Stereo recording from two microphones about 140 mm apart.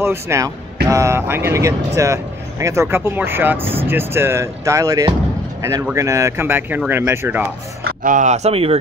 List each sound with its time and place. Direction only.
0.0 s speech: 20° right (ahead or behind)
7.8 s speech: 75° right (ahead or behind); by 8.7 s 45° right (ahead or behind)